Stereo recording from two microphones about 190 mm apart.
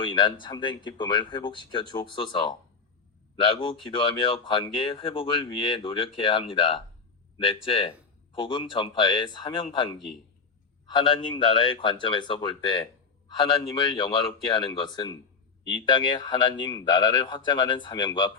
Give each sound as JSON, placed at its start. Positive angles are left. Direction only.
{"t": 0.0, "sound": "speech", "side_deg": 25}